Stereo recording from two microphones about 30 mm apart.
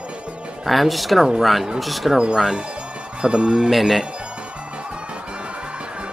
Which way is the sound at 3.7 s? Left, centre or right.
Centre.